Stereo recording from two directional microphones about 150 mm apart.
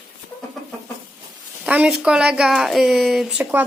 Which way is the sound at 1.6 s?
10° right (ahead or behind).